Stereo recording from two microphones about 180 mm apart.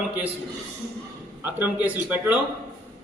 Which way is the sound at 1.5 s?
10° right (ahead or behind).